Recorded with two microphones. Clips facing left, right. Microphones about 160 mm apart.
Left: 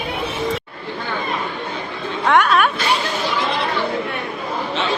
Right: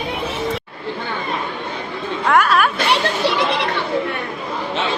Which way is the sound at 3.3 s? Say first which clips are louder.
Right 1 dB; 75° right (ahead or behind).